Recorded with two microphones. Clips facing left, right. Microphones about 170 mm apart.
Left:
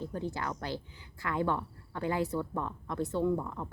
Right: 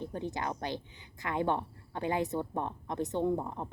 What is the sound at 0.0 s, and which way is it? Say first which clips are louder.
Speech: even; 20° right (ahead or behind).